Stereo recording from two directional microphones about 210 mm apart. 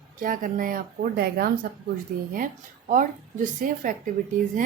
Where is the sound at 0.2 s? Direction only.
40° right (ahead or behind).